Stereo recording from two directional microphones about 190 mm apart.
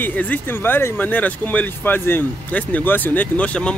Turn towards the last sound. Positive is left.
turn(degrees=5)  # may be behind; listen again after turning